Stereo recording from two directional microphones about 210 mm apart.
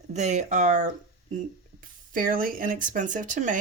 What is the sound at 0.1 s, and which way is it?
Speech, 35° right (ahead or behind).